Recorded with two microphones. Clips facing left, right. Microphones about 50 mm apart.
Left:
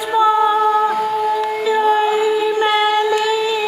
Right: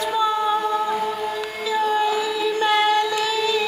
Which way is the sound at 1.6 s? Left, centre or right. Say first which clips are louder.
Left 4 dB; left.